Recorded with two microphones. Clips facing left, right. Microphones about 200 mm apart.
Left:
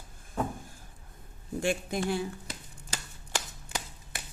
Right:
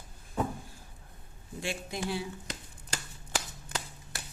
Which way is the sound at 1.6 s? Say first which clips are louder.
Left 5 dB; 50° left (ahead or behind).